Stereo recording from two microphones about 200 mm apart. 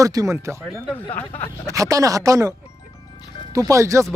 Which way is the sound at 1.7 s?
15° right (ahead or behind).